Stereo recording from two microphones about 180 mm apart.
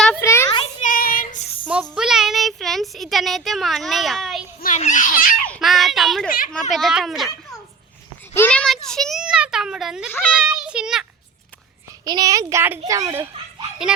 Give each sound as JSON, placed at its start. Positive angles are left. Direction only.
{"t": 0.2, "sound": "children playing", "side_deg": 15}
{"t": 0.8, "sound": "child singing", "side_deg": 50}
{"t": 1.6, "sound": "a sound", "side_deg": -5}
{"t": 4.6, "sound": "a child's voice", "side_deg": 45}
{"t": 5.5, "sound": "child singing", "side_deg": 0}
{"t": 6.2, "sound": "a child's voice", "side_deg": 50}
{"t": 6.5, "sound": "a child's voice", "side_deg": 0}
{"t": 8.3, "sound": "a child's voice", "side_deg": 10}
{"t": 12.0, "sound": "a child's voice", "side_deg": -20}